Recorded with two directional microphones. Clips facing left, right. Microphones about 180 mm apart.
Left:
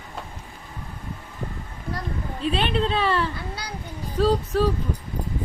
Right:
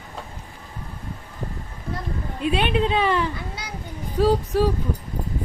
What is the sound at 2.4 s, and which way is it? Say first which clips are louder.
Speech: right 2 dB; 10° right (ahead or behind).